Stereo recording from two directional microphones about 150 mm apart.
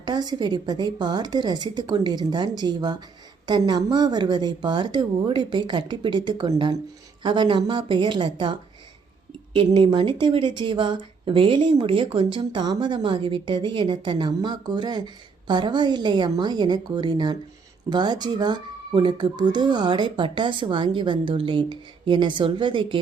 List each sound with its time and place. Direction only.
0.0 s a woman's voice: 30° right (ahead or behind)
9.6 s speech: 35° right (ahead or behind)